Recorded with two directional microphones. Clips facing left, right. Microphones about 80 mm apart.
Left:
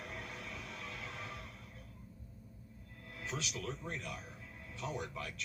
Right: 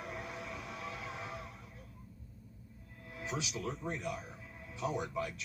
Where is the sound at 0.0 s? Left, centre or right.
Centre.